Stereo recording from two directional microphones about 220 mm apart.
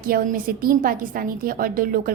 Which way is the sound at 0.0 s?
40° right (ahead or behind).